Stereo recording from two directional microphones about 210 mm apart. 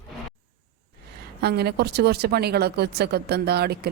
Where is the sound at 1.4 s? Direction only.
50° right (ahead or behind).